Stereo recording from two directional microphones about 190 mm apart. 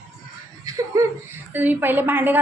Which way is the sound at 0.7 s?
15° right (ahead or behind).